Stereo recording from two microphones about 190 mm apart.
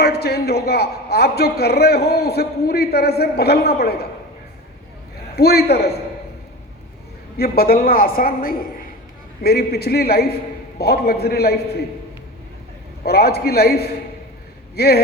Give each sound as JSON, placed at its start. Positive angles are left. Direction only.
{"t": 0.0, "sound": "a man's voice", "side_deg": 55}
{"t": 5.4, "sound": "a man's voice", "side_deg": 55}
{"t": 7.3, "sound": "a woman's voice", "side_deg": 55}
{"t": 13.0, "sound": "a man's voice", "side_deg": 55}